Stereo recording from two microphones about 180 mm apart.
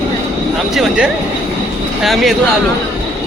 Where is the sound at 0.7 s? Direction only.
Centre (ahead or behind).